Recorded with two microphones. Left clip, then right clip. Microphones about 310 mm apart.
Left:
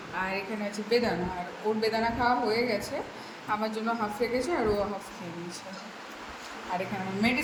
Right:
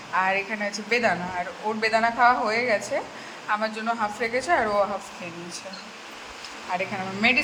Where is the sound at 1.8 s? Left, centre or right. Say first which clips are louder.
Right 9 dB; centre.